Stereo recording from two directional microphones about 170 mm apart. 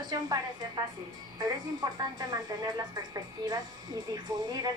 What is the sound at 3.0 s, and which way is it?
A woman's voice, 25° right (ahead or behind).